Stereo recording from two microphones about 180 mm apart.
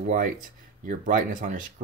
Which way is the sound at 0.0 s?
45° right (ahead or behind).